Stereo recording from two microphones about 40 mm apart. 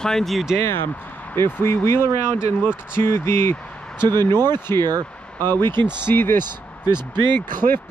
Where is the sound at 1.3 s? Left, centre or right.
Left.